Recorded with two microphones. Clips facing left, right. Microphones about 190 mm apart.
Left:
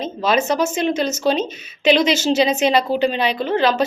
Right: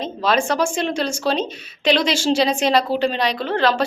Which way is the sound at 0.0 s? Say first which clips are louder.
Left 1 dB; 5° left (ahead or behind).